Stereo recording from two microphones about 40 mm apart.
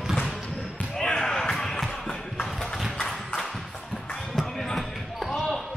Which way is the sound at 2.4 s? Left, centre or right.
Centre.